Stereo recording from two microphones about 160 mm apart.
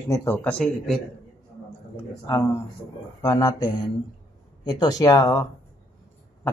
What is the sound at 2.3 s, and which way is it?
Speech, 15° left (ahead or behind).